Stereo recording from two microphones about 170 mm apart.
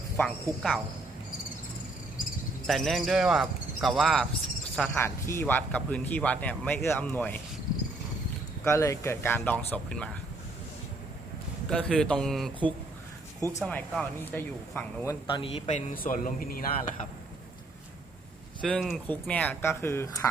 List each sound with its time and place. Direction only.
0.2 s speech: 5° left (ahead or behind)
2.6 s speech: centre (ahead or behind)
4.8 s speech: 15° left (ahead or behind)
8.6 s speech: 15° left (ahead or behind)
11.7 s speech: 5° left (ahead or behind)
13.7 s speech: 10° left (ahead or behind)
15.3 s a man's voice: 30° left (ahead or behind)
16.0 s speech: 50° left (ahead or behind)
18.6 s speech: centre (ahead or behind)